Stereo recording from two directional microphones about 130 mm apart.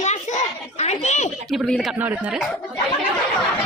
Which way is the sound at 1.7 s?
Centre (ahead or behind).